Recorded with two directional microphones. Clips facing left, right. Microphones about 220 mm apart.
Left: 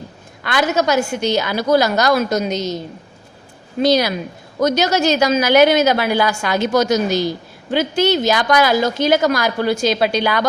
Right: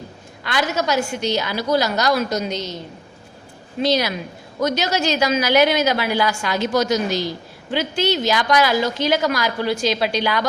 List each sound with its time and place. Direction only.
0.4 s a woman's voice: 50° left (ahead or behind)
3.8 s a woman's voice: 40° left (ahead or behind)